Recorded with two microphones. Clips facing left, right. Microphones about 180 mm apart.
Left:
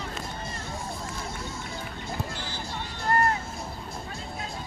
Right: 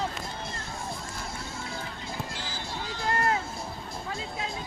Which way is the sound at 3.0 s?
90° right.